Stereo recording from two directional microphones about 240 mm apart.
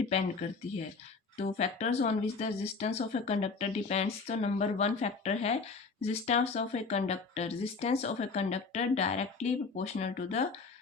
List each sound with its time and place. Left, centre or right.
0.1 s speech: left
1.4 s speech: left